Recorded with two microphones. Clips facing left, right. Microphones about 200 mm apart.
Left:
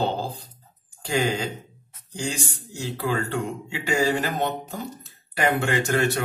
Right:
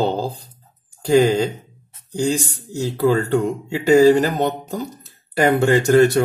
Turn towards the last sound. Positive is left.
turn(degrees=-40)  # may be behind; listen again after turning